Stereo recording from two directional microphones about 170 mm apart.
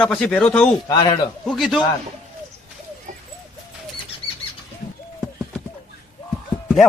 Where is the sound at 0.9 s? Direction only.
25° left (ahead or behind).